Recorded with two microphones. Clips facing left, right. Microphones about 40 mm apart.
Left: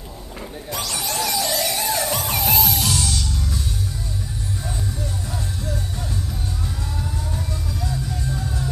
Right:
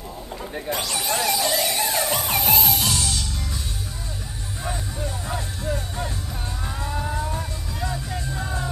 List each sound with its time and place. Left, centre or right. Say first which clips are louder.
0.8 s music: even; centre
5.3 s music: right 1 dB; right